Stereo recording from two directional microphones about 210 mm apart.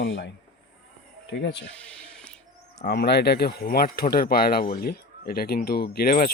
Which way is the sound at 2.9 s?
50° left (ahead or behind).